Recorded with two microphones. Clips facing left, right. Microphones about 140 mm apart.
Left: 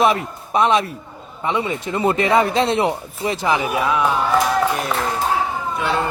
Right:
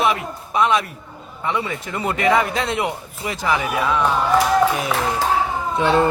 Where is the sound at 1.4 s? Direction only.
20° left (ahead or behind).